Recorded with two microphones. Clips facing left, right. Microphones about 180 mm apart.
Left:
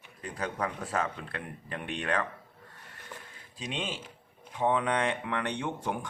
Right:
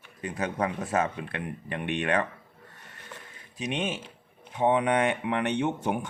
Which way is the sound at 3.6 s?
20° right (ahead or behind).